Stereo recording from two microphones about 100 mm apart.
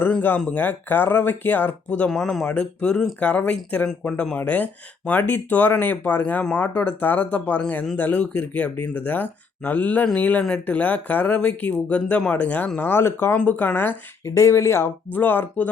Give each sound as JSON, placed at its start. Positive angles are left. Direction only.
{"t": 0.0, "sound": "speech", "side_deg": 15}
{"t": 13.3, "sound": "speech", "side_deg": 15}